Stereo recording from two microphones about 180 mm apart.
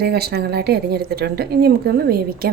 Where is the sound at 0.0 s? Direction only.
60° right (ahead or behind).